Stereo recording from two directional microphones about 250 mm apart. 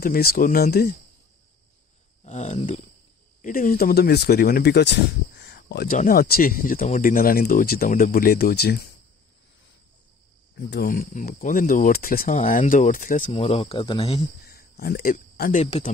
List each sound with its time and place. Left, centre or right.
0.0 s speech: left
2.2 s speech: left
10.5 s speech: left
14.4 s speech: left